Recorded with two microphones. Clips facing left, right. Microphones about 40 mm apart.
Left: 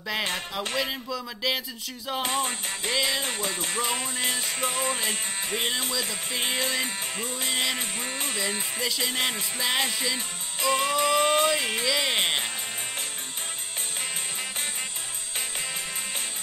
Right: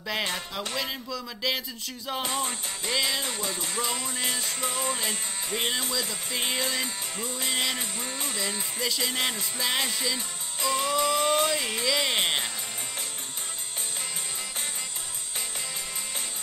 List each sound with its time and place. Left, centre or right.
0.7 s speech: centre
2.2 s music: left
5.9 s music: left
6.6 s music: left
8.4 s music: left
9.1 s speech: centre
10.1 s music: left
11.9 s music: centre